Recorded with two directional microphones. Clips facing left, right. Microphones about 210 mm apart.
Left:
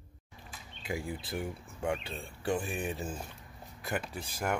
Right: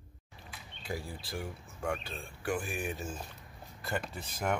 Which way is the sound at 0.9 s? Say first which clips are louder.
Left 3 dB; 20° left (ahead or behind).